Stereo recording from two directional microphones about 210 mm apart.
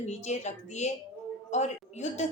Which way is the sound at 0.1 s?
35° left (ahead or behind).